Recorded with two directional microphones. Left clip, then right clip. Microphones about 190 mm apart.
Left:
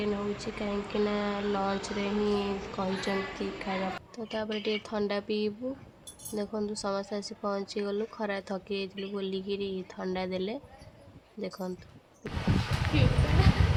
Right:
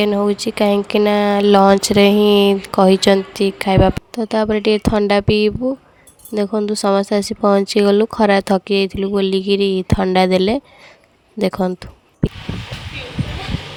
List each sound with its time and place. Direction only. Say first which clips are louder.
0.0 s speech: right 16 dB; 60° right (ahead or behind)